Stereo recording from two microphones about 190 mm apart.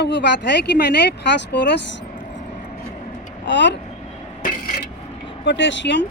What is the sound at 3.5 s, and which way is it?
Speech, 70° left (ahead or behind).